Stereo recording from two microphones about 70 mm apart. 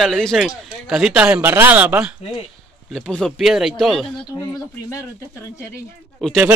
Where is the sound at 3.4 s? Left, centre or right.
Centre.